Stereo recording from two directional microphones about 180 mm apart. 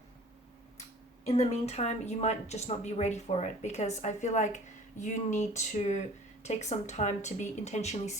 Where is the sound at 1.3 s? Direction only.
40° left (ahead or behind).